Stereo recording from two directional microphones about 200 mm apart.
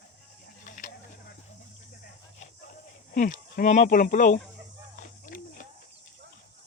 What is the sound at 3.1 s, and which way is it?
Speech, 40° left (ahead or behind).